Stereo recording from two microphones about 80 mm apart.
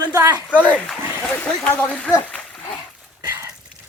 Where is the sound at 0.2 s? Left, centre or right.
Right.